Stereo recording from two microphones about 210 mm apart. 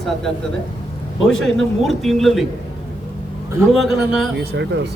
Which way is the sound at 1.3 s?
Centre (ahead or behind).